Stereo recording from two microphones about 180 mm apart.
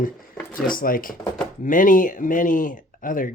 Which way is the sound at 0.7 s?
50° left (ahead or behind).